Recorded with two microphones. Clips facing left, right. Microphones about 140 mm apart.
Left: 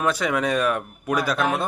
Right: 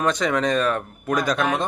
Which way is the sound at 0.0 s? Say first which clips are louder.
Right 1 dB; 5° left (ahead or behind).